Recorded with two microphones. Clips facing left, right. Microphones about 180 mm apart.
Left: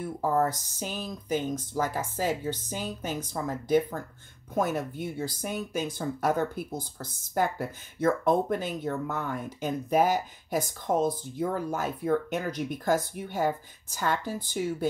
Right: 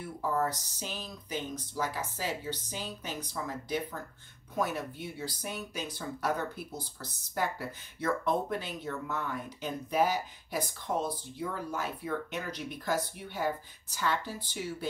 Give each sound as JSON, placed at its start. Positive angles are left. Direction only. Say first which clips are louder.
{"t": 0.0, "sound": "speech", "louder": "left 5 dB", "side_deg": 45}